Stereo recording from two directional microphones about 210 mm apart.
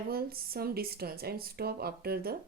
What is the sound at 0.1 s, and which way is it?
Speech, 45° right (ahead or behind).